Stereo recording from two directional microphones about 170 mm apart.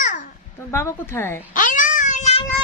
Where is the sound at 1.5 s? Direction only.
50° left (ahead or behind).